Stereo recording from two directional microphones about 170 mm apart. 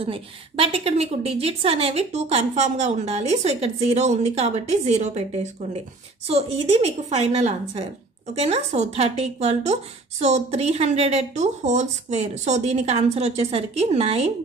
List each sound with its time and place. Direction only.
0.0 s a woman's voice: 35° right (ahead or behind)